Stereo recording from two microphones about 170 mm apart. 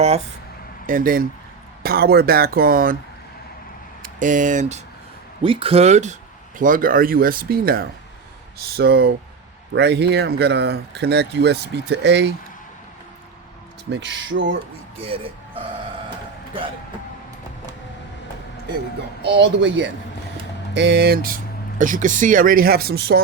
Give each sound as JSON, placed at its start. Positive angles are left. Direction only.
{"t": 0.9, "sound": "speech", "side_deg": -55}
{"t": 4.0, "sound": "speech", "side_deg": -50}
{"t": 5.4, "sound": "speech", "side_deg": -30}
{"t": 6.6, "sound": "speech", "side_deg": -50}
{"t": 13.9, "sound": "speech", "side_deg": -90}
{"t": 15.0, "sound": "speech", "side_deg": -30}
{"t": 16.0, "sound": "music", "side_deg": -30}
{"t": 19.2, "sound": "speech", "side_deg": -90}